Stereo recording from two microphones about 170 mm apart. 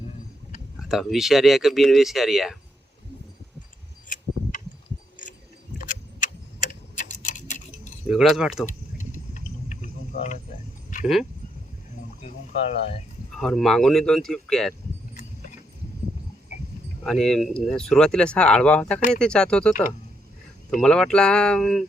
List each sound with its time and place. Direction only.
0.9 s speech: centre (ahead or behind)
5.8 s clock: 50° left (ahead or behind)
8.0 s speech: 5° right (ahead or behind)
8.6 s cricket: 45° left (ahead or behind)
11.0 s speech: 5° right (ahead or behind)
13.4 s speech: centre (ahead or behind)
17.0 s speech: centre (ahead or behind)
20.8 s speech: 5° left (ahead or behind)